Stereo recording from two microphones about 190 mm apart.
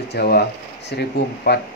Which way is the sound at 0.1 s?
55° left (ahead or behind).